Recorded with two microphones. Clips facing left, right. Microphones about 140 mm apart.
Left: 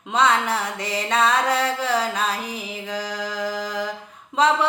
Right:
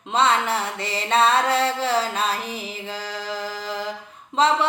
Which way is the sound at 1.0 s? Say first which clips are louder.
Right 2 dB; 30° right (ahead or behind).